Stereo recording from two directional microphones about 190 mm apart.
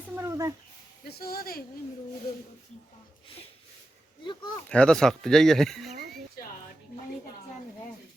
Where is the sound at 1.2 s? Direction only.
55° left (ahead or behind).